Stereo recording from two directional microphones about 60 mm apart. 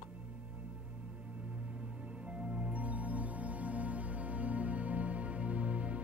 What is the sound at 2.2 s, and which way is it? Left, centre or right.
Music, right.